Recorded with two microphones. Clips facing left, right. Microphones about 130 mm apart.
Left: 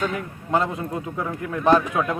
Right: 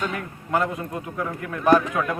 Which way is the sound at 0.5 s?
25° left (ahead or behind).